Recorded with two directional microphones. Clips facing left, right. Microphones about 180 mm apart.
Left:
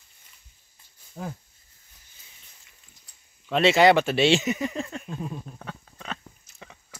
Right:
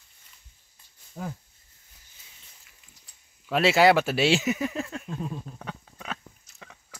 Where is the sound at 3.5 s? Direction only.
5° right (ahead or behind).